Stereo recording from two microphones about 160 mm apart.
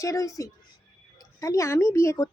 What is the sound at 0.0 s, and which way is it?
A woman's voice, 20° left (ahead or behind).